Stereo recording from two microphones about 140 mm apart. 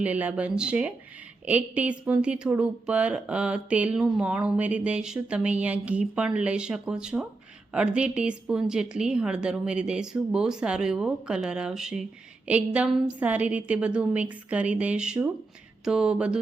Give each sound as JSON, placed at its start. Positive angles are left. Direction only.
{"t": 0.0, "sound": "a woman's voice", "side_deg": -10}